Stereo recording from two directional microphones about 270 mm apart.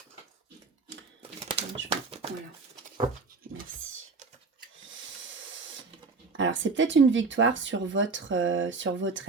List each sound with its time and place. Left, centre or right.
1.5 s bird: right
4.9 s a sound: right
6.3 s speech: right